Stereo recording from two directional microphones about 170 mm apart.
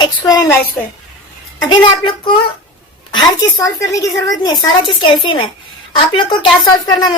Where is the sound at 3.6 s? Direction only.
20° left (ahead or behind).